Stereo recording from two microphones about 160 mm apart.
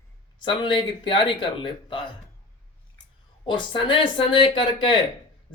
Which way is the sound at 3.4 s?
30° left (ahead or behind).